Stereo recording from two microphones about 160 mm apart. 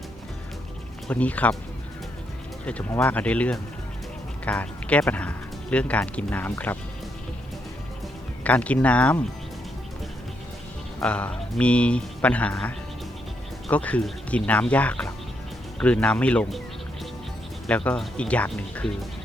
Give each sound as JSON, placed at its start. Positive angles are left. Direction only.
{"t": 1.0, "sound": "a man's voice", "side_deg": 10}
{"t": 2.6, "sound": "a man's voice", "side_deg": 10}
{"t": 8.4, "sound": "a man's voice", "side_deg": 10}
{"t": 11.0, "sound": "a man's voice", "side_deg": 5}
{"t": 17.7, "sound": "a man's voice", "side_deg": 10}